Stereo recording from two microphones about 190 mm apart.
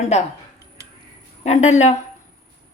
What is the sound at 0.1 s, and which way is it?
Speech, 35° left (ahead or behind).